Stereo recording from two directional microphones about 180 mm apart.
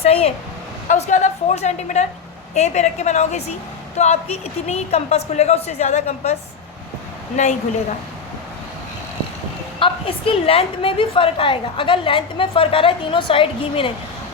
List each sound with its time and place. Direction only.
0.0 s speech: 35° left (ahead or behind)
7.4 s speech: 40° left (ahead or behind)
9.8 s a woman's voice: 30° left (ahead or behind)